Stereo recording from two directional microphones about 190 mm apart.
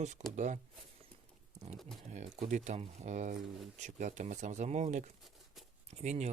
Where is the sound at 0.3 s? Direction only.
40° right (ahead or behind).